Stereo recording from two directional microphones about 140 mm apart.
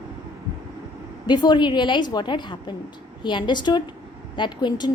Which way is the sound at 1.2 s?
30° left (ahead or behind).